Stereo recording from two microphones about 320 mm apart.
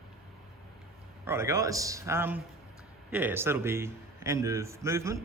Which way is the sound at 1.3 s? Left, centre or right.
Centre.